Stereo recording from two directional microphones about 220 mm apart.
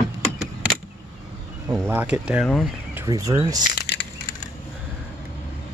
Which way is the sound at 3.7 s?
50° left (ahead or behind).